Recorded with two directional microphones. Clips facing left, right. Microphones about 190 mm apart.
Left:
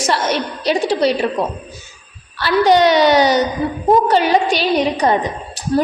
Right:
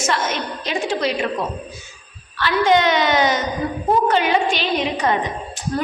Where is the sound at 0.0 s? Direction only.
35° left (ahead or behind).